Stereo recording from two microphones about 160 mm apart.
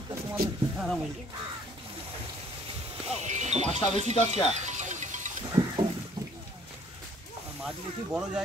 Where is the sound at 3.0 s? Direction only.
45° right (ahead or behind).